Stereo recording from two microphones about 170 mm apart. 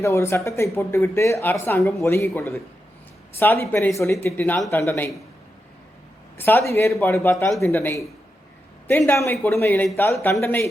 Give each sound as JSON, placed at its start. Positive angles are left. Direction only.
{"t": 0.0, "sound": "speech", "side_deg": 15}
{"t": 6.3, "sound": "speech", "side_deg": 15}